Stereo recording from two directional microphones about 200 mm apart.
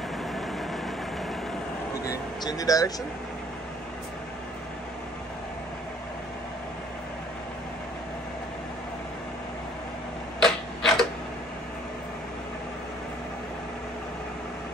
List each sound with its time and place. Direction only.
2.0 s speech: 15° left (ahead or behind)
10.4 s tick-tock: centre (ahead or behind)